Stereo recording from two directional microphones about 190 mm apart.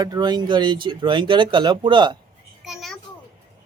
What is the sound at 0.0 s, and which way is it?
Speech, 20° right (ahead or behind).